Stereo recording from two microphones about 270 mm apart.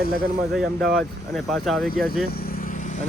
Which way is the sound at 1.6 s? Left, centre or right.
Centre.